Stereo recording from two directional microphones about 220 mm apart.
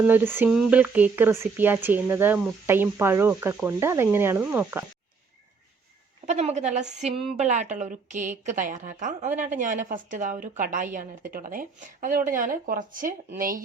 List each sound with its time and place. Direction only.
0.1 s speech: 10° right (ahead or behind)
6.2 s a woman's voice: 30° right (ahead or behind)
9.3 s speech: 10° right (ahead or behind)
9.6 s a woman's voice: 35° right (ahead or behind)